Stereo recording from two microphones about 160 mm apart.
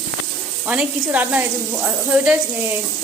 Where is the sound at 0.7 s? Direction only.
10° right (ahead or behind).